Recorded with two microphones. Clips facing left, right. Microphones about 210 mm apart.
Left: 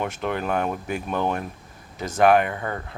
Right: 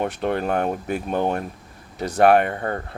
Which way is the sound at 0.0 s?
45° right (ahead or behind).